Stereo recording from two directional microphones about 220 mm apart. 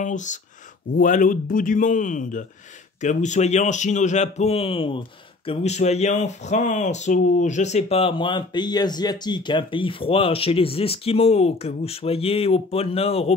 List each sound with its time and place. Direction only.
0.0 s a man's voice: 35° left (ahead or behind)